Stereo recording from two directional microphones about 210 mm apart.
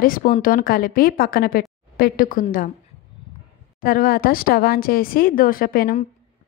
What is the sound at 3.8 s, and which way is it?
Speech, 45° left (ahead or behind).